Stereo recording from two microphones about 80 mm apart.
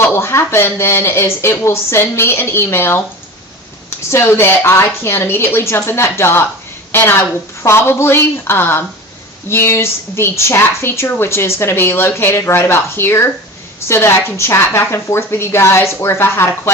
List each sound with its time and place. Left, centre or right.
0.0 s a woman's voice: left